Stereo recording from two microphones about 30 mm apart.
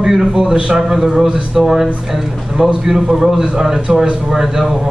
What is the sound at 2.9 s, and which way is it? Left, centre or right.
A man's voice, centre.